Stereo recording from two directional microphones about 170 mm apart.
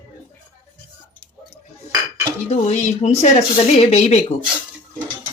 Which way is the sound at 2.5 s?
40° left (ahead or behind).